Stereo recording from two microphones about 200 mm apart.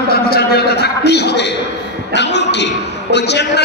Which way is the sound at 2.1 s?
60° left (ahead or behind).